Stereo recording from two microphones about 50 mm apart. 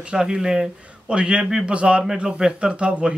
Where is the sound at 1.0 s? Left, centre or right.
Right.